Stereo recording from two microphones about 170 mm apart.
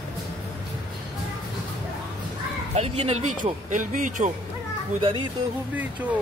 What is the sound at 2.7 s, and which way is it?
Speech, 40° right (ahead or behind).